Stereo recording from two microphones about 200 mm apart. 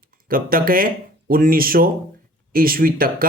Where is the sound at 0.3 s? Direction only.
45° right (ahead or behind).